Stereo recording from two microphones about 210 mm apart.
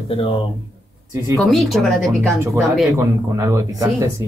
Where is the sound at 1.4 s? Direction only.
Centre (ahead or behind).